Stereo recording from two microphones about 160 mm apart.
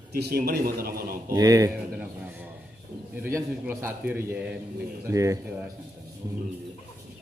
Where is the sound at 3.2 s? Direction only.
15° right (ahead or behind).